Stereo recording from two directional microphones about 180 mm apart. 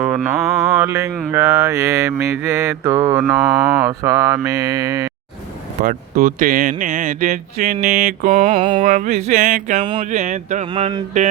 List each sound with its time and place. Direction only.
0.0 s mantra: 5° right (ahead or behind)
5.8 s speech: 50° right (ahead or behind)
8.5 s a sound: 25° right (ahead or behind)
8.8 s speech: 45° right (ahead or behind)
10.7 s speech: 30° right (ahead or behind)